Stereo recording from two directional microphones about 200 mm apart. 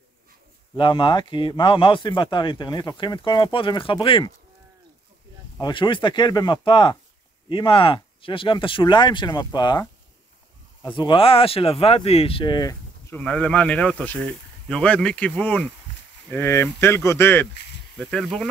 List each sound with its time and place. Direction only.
0.7 s a man's voice: 25° left (ahead or behind)
5.6 s a man's voice: 25° left (ahead or behind)
13.1 s speech: 5° left (ahead or behind)